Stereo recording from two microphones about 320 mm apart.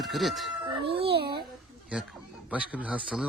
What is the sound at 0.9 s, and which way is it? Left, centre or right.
Speech, centre.